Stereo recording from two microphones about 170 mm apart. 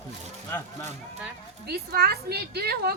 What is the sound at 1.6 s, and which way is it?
A woman's voice, 65° right (ahead or behind).